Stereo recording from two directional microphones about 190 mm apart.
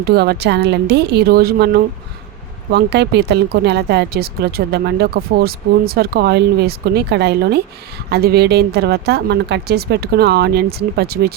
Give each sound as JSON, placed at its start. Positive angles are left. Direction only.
{"t": 0.0, "sound": "speech", "side_deg": -60}